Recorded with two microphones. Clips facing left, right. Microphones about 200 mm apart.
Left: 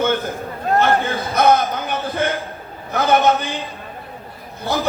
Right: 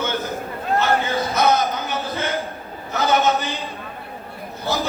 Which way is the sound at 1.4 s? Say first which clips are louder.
Left 4 dB; 55° left (ahead or behind).